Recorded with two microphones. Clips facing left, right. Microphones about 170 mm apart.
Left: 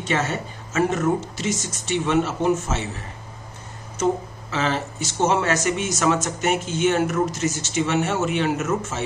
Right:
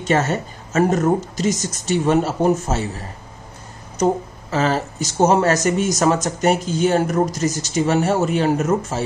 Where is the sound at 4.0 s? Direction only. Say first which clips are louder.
Right 3 dB; 40° right (ahead or behind).